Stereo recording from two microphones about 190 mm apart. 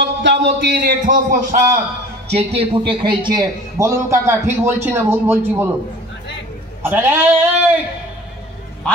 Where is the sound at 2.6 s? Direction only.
25° right (ahead or behind).